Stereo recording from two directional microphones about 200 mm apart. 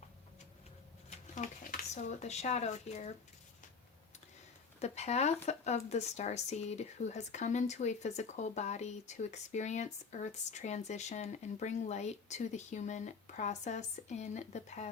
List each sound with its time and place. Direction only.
1.4 s speech: 40° left (ahead or behind)
4.8 s speech: 35° left (ahead or behind)